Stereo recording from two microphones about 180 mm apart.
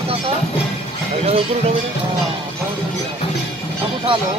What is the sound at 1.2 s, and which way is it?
Speech, 35° right (ahead or behind).